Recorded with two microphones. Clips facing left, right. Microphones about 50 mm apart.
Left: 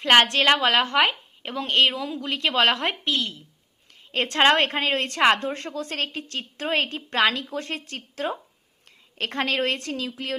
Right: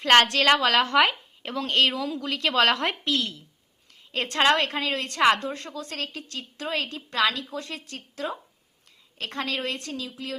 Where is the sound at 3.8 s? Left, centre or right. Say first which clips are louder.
Left 3 dB; left.